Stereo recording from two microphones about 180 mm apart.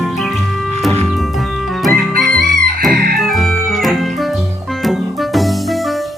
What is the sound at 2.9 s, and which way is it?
Chicken, 50° right (ahead or behind).